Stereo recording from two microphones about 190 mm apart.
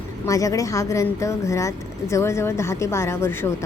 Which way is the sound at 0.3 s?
15° left (ahead or behind).